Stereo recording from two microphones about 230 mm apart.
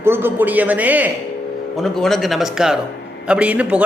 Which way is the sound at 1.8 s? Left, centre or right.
Centre.